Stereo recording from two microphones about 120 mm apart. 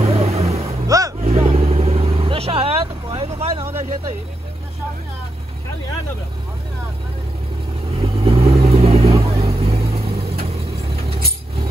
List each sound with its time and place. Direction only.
0.0 s vehicle: 55° right (ahead or behind)
0.8 s vehicle: 30° right (ahead or behind)
1.2 s vehicle: 65° right (ahead or behind)
7.9 s vehicle: 55° right (ahead or behind)